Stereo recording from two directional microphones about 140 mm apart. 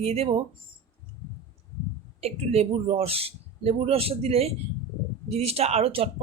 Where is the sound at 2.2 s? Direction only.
45° right (ahead or behind).